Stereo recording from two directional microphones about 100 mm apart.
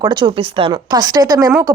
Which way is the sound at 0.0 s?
50° right (ahead or behind).